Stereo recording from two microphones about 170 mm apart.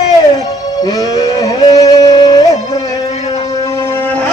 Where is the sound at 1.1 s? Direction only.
25° left (ahead or behind).